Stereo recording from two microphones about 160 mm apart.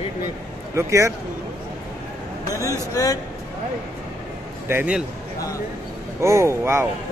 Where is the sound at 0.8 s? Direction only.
20° right (ahead or behind).